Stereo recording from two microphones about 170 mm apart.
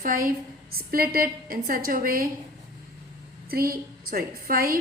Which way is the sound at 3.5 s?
60° right (ahead or behind).